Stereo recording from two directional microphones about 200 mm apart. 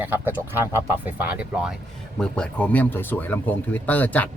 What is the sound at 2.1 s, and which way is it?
Speech, 5° left (ahead or behind).